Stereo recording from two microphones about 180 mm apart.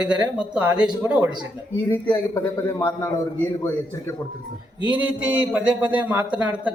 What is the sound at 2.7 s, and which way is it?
Speech, 15° left (ahead or behind).